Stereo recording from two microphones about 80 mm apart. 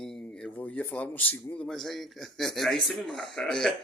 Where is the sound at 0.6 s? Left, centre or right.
Centre.